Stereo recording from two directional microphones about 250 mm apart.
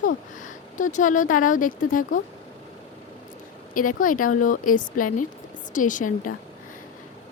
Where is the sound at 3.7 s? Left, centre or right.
Left.